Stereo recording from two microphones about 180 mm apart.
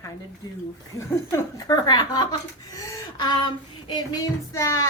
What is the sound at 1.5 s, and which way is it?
Child singing, 20° left (ahead or behind).